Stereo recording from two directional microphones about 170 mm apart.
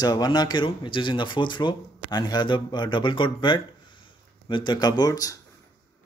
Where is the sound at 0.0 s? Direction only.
25° left (ahead or behind).